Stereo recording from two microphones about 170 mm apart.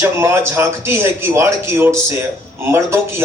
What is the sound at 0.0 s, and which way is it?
Speech, 15° right (ahead or behind).